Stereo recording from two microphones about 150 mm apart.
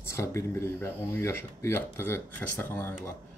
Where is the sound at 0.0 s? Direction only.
20° left (ahead or behind).